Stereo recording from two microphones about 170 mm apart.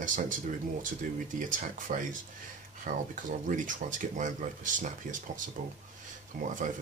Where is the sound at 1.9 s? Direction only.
45° right (ahead or behind).